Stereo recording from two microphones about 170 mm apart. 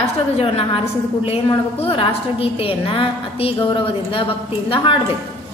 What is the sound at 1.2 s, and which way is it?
A woman's voice, 35° left (ahead or behind).